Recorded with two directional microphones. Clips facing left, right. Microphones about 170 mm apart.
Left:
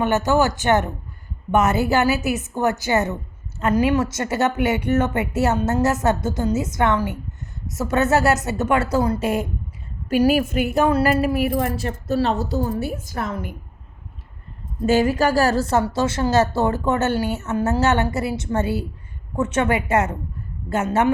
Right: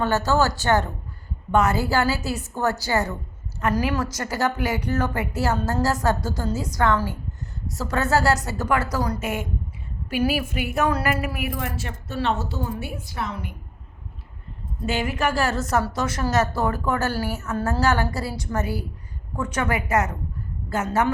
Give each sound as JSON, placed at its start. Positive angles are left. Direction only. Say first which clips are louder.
{"t": 0.0, "sound": "a woman's voice", "louder": "left 3 dB", "side_deg": 20}
{"t": 10.1, "sound": "a woman's voice", "louder": "left 6 dB", "side_deg": 45}
{"t": 10.8, "sound": "a woman's voice", "louder": "left 5 dB", "side_deg": 30}
{"t": 14.8, "sound": "a woman's voice", "louder": "left 7 dB", "side_deg": 40}